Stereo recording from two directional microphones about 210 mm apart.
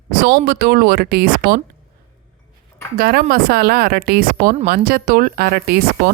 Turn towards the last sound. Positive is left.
turn(degrees=-45)  # may be behind; listen again after turning